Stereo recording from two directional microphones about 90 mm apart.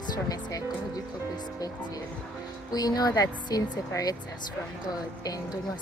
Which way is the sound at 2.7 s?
45° left (ahead or behind).